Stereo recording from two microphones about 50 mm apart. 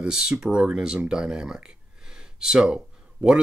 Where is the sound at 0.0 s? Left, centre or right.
Centre.